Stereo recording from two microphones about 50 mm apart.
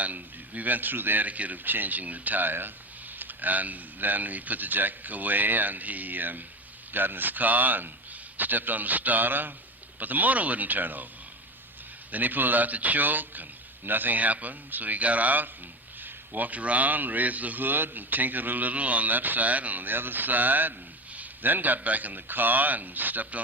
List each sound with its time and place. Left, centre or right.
0.0 s a man's voice: right
12.1 s a man's voice: right